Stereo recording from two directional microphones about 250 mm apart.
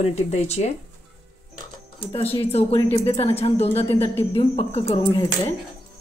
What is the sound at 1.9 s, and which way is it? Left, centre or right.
Speech, left.